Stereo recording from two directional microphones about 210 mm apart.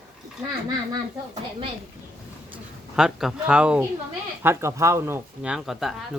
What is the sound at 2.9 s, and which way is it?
Speech, centre (ahead or behind).